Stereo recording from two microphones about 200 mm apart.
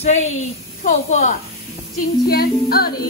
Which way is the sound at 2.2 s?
50° left (ahead or behind).